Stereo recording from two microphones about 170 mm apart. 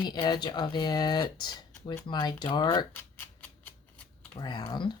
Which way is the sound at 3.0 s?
10° left (ahead or behind).